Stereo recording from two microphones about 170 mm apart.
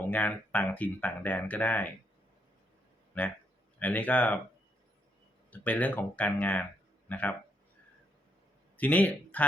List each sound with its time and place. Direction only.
0.1 s speech: 10° left (ahead or behind)
3.1 s speech: 10° left (ahead or behind)
5.5 s speech: 10° left (ahead or behind)
8.8 s speech: 10° left (ahead or behind)